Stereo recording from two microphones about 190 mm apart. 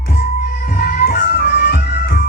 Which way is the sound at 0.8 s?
50° left (ahead or behind).